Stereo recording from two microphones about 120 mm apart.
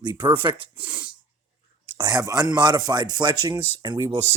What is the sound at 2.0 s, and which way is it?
Speech, 35° right (ahead or behind).